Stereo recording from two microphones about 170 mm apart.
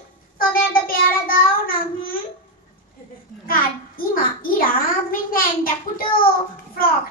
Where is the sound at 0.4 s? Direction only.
60° left (ahead or behind).